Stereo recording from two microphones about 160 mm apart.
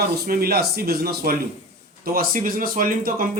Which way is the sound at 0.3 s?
70° right (ahead or behind).